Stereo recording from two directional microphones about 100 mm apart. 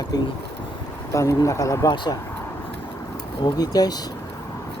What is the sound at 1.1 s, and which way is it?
Speech, 30° left (ahead or behind).